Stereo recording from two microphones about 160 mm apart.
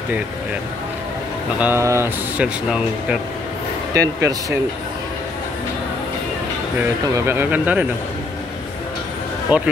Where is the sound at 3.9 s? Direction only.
20° right (ahead or behind).